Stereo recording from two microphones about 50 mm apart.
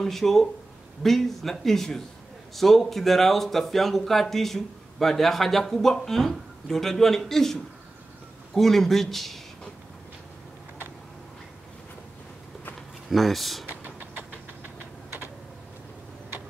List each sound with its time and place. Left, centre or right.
0.0 s speech: centre
8.5 s speech: centre
13.1 s speech: centre
13.7 s a sound: right